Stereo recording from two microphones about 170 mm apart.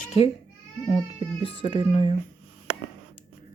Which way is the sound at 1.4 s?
30° left (ahead or behind).